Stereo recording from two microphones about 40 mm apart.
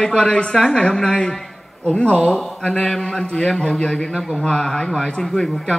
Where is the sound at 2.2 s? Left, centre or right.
Centre.